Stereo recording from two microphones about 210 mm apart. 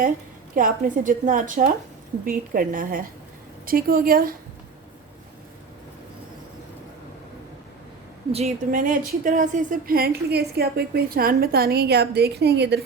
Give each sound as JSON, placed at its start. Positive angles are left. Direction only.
{"t": 0.5, "sound": "a woman's voice", "side_deg": -40}
{"t": 8.3, "sound": "a woman's voice", "side_deg": -30}